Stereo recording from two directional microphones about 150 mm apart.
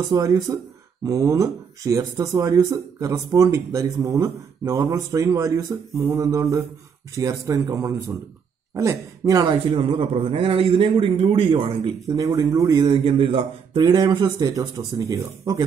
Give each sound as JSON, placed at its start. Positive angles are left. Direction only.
{"t": 0.1, "sound": "a man's voice", "side_deg": -25}
{"t": 12.2, "sound": "speech", "side_deg": -25}
{"t": 12.9, "sound": "speech", "side_deg": -35}